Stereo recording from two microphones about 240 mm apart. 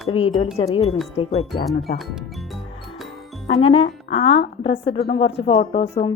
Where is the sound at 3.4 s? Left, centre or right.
Left.